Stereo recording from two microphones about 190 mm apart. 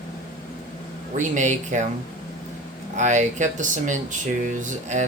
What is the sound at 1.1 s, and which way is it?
Speech, 40° right (ahead or behind).